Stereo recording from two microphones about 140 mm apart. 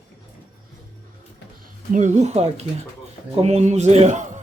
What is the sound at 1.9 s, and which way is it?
A man's voice, 60° right (ahead or behind).